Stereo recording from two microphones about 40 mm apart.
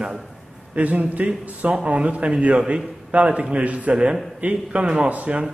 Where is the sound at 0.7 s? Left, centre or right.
Right.